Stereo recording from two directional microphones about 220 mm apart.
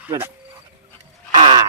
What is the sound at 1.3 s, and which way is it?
Crow, 20° right (ahead or behind).